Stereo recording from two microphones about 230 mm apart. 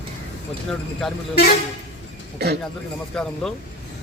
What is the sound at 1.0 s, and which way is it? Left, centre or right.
Speech, centre.